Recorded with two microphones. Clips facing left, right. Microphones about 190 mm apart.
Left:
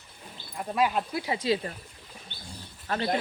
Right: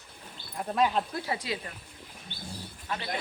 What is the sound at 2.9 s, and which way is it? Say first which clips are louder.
Speech: left 5 dB; 45° left (ahead or behind).